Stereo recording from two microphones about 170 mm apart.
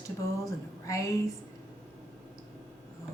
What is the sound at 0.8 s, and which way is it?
Speech, 20° left (ahead or behind).